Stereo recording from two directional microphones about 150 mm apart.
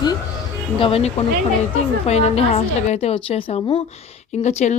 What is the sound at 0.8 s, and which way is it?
Speech, 40° left (ahead or behind).